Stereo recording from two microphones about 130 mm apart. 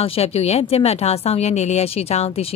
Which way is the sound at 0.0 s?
50° left (ahead or behind).